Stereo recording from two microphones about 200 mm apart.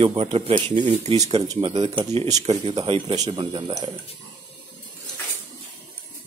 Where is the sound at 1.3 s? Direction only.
20° right (ahead or behind).